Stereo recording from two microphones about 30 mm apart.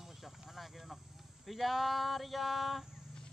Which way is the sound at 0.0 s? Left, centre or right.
Centre.